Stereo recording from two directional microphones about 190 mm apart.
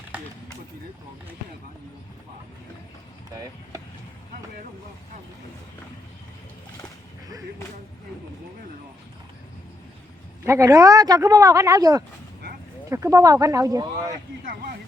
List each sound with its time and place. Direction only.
10.4 s speech: 15° right (ahead or behind)
14.4 s speech: 50° right (ahead or behind)